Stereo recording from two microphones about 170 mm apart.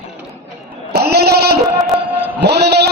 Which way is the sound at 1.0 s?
70° right (ahead or behind).